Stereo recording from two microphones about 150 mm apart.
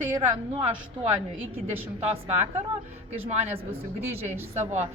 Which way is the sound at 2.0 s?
45° right (ahead or behind).